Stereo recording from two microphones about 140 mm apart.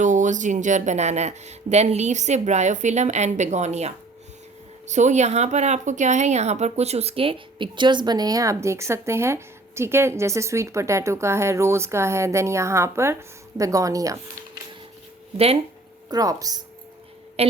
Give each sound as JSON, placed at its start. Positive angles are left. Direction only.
{"t": 0.0, "sound": "speech", "side_deg": -60}
{"t": 16.0, "sound": "speech", "side_deg": -25}